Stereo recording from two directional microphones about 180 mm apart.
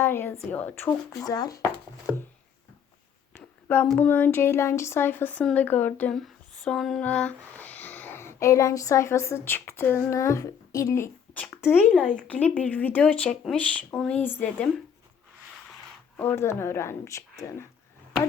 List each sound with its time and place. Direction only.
0.0 s a woman's voice: 10° left (ahead or behind)
3.3 s speech: 10° left (ahead or behind)
16.1 s speech: 10° left (ahead or behind)